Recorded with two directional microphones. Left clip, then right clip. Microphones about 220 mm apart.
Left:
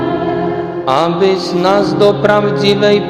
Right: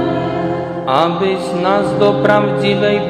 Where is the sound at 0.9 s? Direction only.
20° left (ahead or behind).